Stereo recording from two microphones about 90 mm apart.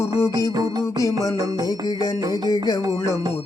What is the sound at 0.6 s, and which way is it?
Music, 45° right (ahead or behind).